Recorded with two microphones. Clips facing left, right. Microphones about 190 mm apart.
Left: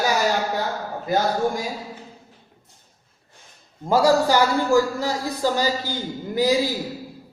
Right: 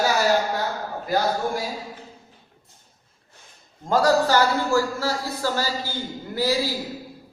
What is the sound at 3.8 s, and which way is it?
A man's voice, 10° left (ahead or behind).